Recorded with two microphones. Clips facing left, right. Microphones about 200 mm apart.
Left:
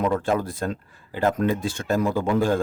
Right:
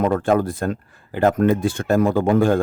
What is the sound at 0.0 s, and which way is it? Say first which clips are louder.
Speech: right 5 dB; 50° right (ahead or behind).